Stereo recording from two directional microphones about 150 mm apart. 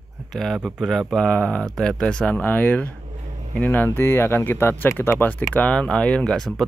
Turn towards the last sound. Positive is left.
turn(degrees=0)  # may be behind; listen again after turning